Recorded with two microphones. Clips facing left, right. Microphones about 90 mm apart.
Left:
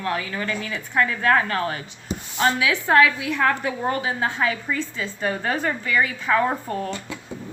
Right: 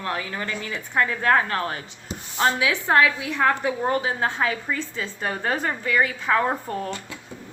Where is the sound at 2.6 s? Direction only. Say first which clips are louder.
Left 3 dB; 25° right (ahead or behind).